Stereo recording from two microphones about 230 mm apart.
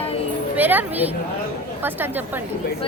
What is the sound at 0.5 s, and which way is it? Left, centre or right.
Speech, centre.